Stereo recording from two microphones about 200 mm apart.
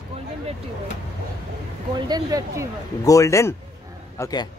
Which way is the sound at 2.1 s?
20° right (ahead or behind).